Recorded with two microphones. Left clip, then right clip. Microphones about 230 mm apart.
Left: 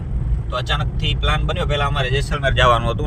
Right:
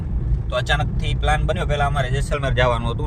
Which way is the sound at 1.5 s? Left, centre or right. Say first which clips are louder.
Left 1 dB; right.